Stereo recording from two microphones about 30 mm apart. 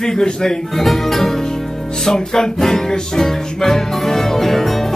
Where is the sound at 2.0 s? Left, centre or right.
Left.